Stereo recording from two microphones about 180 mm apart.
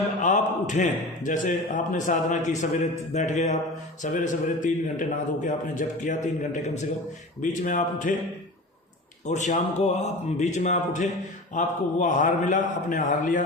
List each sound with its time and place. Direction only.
0.2 s a man's voice: 45° left (ahead or behind)
9.2 s a man's voice: 40° left (ahead or behind)